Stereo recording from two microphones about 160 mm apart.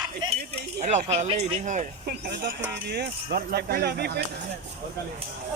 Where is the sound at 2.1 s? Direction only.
80° right.